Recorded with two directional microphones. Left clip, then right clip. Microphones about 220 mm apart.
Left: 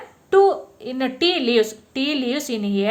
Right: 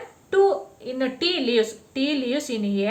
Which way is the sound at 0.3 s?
40° left (ahead or behind).